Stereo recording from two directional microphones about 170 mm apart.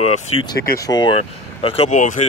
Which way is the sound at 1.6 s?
35° left (ahead or behind).